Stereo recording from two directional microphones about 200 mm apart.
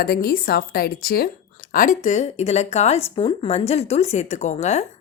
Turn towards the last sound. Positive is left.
turn(degrees=35)  # may be behind; listen again after turning